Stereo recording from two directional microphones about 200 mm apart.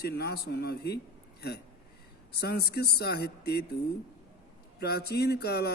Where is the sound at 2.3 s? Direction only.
55° left (ahead or behind).